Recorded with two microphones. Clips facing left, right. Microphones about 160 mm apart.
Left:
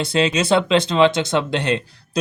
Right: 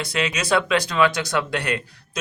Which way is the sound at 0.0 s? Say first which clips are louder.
Left 7 dB; 30° left (ahead or behind).